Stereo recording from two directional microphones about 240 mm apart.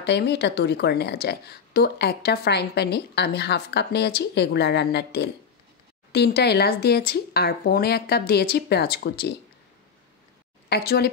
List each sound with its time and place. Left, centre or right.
0.0 s a woman's voice: left
10.7 s a woman's voice: left